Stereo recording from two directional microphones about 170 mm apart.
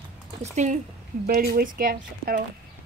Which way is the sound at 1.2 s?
60° right (ahead or behind).